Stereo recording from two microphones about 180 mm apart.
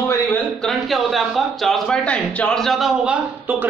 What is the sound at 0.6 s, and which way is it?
A man's voice, centre (ahead or behind).